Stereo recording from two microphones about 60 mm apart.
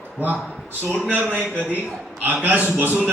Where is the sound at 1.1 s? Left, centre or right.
Right.